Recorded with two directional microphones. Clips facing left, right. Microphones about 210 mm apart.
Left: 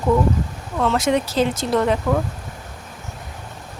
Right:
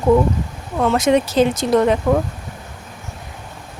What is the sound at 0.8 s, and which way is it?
Speech, 20° right (ahead or behind).